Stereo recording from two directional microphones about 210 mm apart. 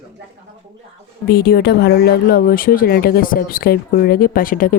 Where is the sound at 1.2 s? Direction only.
45° left (ahead or behind).